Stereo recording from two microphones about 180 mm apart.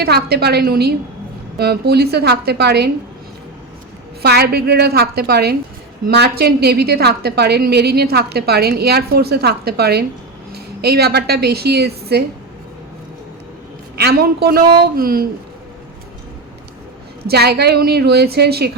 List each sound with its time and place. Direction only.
0.0 s a woman's voice: 60° right (ahead or behind)
4.2 s a woman's voice: 60° right (ahead or behind)
13.9 s a woman's voice: 60° right (ahead or behind)
17.2 s a woman's voice: 60° right (ahead or behind)